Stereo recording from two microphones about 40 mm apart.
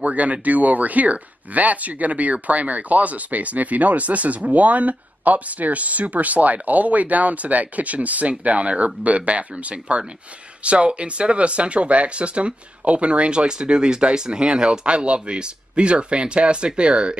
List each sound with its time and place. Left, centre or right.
0.0 s speech: right